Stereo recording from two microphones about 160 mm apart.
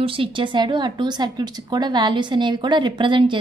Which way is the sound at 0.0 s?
35° right (ahead or behind).